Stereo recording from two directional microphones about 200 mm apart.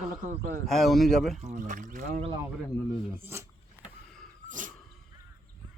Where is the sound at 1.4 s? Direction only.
40° right (ahead or behind).